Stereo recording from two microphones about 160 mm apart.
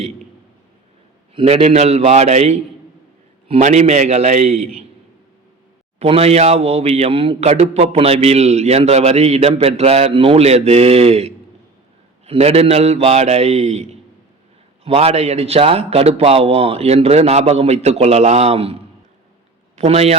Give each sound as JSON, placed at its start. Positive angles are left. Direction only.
{"t": 1.4, "sound": "a man's voice", "side_deg": -35}
{"t": 6.0, "sound": "a man's voice", "side_deg": -40}